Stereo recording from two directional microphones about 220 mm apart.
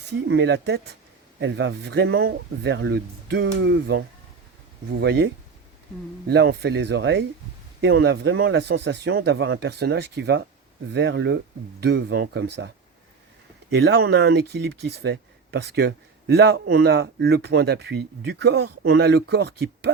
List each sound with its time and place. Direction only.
0.3 s speech: 50° right (ahead or behind)
13.7 s speech: 45° right (ahead or behind)
18.9 s speech: 45° right (ahead or behind)